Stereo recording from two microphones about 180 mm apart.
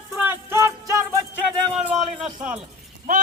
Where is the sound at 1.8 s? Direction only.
5° right (ahead or behind).